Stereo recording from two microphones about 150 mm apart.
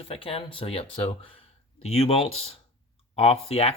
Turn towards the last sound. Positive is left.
turn(degrees=40)  # may be behind; listen again after turning